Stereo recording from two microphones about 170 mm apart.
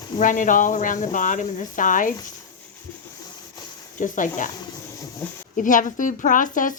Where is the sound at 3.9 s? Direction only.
50° left (ahead or behind).